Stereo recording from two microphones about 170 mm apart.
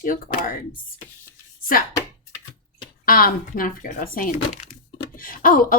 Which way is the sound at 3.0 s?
60° left (ahead or behind).